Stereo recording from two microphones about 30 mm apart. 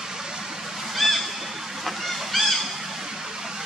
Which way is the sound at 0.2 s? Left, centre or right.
Centre.